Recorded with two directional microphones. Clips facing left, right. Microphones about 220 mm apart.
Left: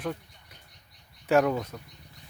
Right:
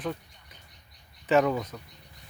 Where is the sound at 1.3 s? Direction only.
5° left (ahead or behind).